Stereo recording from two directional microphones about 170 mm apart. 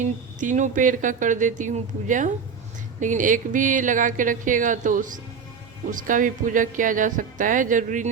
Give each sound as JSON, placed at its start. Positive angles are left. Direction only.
{"t": 0.0, "sound": "speech", "side_deg": -45}